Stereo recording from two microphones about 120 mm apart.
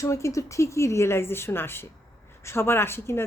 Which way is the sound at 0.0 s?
25° left (ahead or behind).